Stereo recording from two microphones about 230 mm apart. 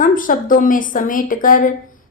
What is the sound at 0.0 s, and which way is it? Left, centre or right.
A woman's voice, left.